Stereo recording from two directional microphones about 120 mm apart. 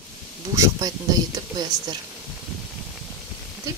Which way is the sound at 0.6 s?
30° right (ahead or behind).